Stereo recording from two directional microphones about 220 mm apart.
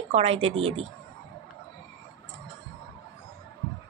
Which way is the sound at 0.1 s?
25° right (ahead or behind).